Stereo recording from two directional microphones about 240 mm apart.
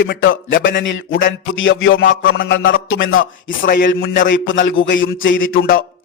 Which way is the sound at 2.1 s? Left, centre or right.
Left.